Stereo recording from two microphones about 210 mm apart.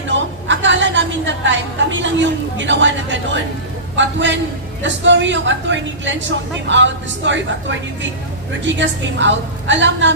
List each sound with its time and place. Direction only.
0.1 s a woman's voice: 60° right (ahead or behind)